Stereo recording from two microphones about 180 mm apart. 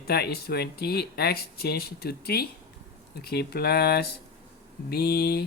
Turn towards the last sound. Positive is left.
turn(degrees=60)  # may be behind; listen again after turning